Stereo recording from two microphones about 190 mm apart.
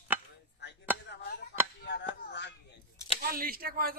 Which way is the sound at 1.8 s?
65° left (ahead or behind).